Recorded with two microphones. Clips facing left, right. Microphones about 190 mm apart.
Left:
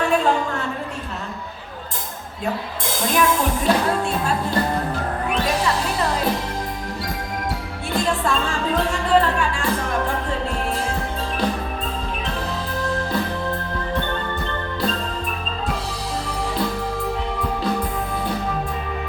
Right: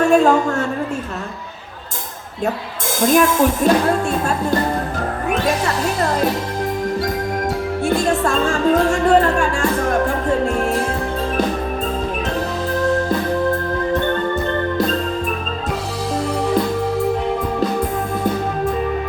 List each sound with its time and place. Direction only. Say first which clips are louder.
0.0 s a woman's voice: right 6 dB; 45° right (ahead or behind)
3.1 s speech: right 6 dB; 45° right (ahead or behind)
5.3 s speech: right 3 dB; 45° right (ahead or behind)
7.9 s music: right 4 dB; 45° right (ahead or behind)